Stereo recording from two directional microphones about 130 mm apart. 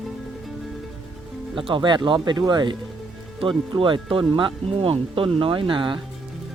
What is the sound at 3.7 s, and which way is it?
Speech, 40° right (ahead or behind).